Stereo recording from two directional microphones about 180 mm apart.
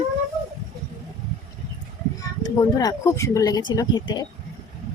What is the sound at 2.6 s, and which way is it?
Speech, 20° left (ahead or behind).